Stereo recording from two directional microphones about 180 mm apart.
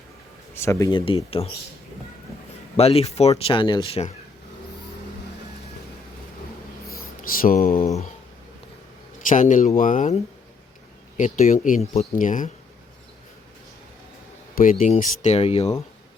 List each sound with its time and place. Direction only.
0.5 s speech: 15° left (ahead or behind)
0.9 s speech: 30° left (ahead or behind)
2.7 s speech: 35° left (ahead or behind)
6.9 s a sound: 50° left (ahead or behind)
7.8 s speech: 35° left (ahead or behind)
9.3 s speech: 45° left (ahead or behind)
11.2 s speech: 40° left (ahead or behind)
14.5 s speech: 50° left (ahead or behind)